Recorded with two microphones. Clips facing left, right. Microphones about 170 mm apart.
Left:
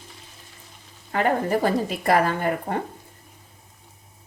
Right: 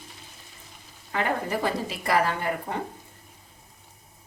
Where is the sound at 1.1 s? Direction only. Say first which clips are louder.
Left 5 dB; 50° left (ahead or behind).